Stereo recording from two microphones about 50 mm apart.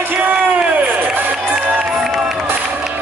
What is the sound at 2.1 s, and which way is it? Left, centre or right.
Run, centre.